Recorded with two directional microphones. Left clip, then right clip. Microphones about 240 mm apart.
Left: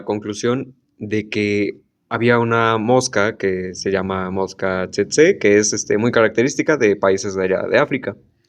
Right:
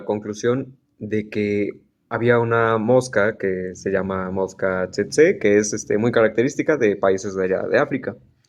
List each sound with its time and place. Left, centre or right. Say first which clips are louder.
0.1 s speech: left 1 dB; left